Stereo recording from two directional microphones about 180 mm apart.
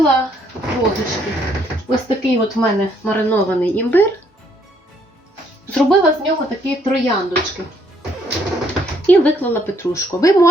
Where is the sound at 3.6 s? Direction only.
10° left (ahead or behind).